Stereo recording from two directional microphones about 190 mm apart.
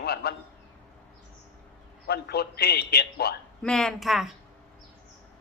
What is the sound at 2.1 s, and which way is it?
A man's voice, 60° left (ahead or behind).